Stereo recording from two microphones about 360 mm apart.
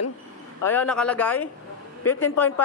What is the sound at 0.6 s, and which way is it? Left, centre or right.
Speech, centre.